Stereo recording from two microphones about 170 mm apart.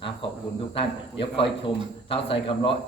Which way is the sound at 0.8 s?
30° left (ahead or behind).